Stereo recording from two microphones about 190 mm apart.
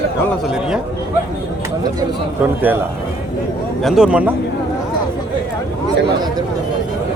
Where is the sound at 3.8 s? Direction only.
5° right (ahead or behind).